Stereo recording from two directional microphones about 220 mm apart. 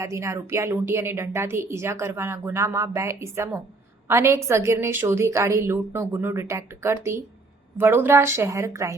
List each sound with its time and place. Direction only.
0.0 s a woman's voice: 15° right (ahead or behind)